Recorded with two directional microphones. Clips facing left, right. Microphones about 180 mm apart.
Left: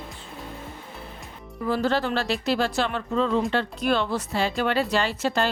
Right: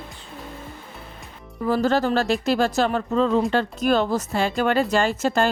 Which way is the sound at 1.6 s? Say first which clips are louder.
Right 4 dB; 45° right (ahead or behind).